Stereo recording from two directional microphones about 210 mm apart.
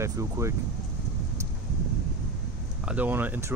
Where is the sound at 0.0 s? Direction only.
15° right (ahead or behind).